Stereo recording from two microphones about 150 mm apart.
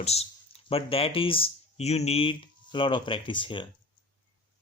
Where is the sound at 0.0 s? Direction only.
45° left (ahead or behind).